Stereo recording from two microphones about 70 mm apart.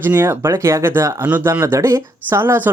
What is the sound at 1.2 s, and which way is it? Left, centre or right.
Speech, right.